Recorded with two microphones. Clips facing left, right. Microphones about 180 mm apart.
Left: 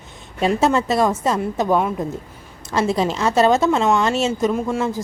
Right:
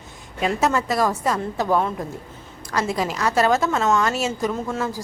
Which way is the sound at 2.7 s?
25° left (ahead or behind).